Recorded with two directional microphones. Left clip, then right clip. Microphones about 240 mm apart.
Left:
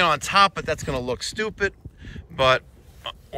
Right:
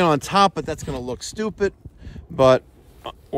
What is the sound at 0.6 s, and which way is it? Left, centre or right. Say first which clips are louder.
Speech: left 2 dB; centre.